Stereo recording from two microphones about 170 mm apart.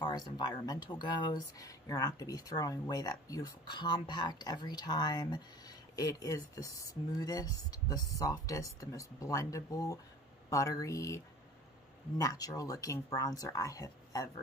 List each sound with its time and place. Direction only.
0.0 s speech: 25° left (ahead or behind)
12.2 s speech: 20° left (ahead or behind)